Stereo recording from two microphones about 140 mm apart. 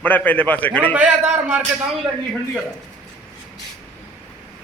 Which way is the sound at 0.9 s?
10° right (ahead or behind).